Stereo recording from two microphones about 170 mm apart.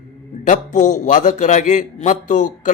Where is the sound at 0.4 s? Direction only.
50° left (ahead or behind).